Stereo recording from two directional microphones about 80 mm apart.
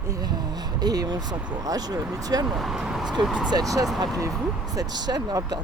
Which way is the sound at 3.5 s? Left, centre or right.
Right.